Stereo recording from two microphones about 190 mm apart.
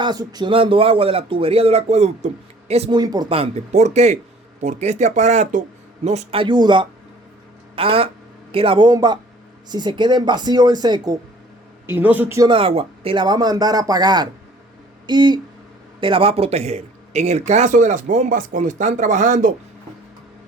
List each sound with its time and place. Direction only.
0.0 s a man's voice: 20° right (ahead or behind)
11.9 s a man's voice: 10° right (ahead or behind)
12.5 s a man's voice: 30° right (ahead or behind)